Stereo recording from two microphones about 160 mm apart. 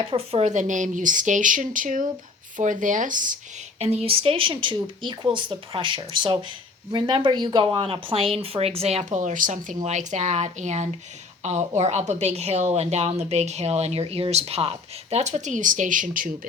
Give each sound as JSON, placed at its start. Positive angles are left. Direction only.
{"t": 0.0, "sound": "a woman's voice", "side_deg": -35}
{"t": 3.8, "sound": "a woman's voice", "side_deg": -40}